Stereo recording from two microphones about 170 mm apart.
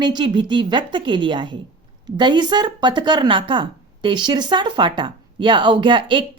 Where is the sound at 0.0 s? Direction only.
25° right (ahead or behind).